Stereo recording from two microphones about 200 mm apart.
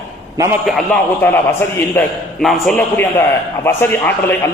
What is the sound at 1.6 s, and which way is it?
A man's voice, 10° left (ahead or behind).